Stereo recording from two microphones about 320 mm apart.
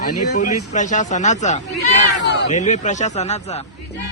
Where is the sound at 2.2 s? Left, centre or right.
Left.